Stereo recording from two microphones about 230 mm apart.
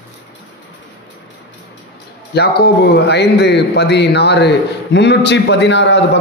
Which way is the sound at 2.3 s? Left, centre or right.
Left.